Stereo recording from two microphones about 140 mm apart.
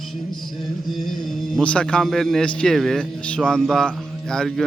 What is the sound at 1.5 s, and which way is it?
A man's voice, 5° left (ahead or behind).